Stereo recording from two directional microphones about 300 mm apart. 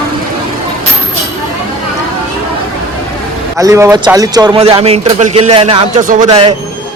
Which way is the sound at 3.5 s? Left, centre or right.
Centre.